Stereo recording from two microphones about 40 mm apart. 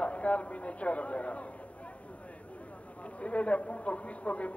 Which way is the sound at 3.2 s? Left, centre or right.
Left.